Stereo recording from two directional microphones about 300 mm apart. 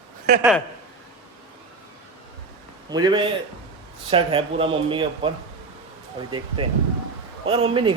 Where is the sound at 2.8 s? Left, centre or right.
Centre.